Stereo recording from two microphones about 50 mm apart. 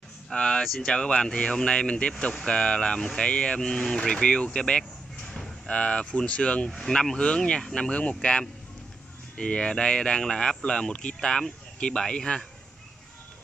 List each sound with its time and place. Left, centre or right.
0.3 s speech: centre